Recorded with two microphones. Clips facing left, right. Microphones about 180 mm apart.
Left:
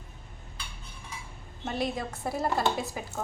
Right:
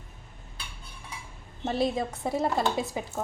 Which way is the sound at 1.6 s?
30° right (ahead or behind).